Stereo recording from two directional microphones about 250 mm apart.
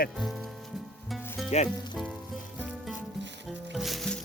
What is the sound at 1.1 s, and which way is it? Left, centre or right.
Music, centre.